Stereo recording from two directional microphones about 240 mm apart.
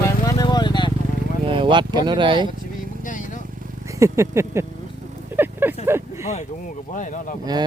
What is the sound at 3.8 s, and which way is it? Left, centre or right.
Speech, centre.